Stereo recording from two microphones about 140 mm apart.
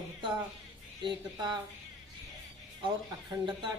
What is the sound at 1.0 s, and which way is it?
Speech, 30° right (ahead or behind).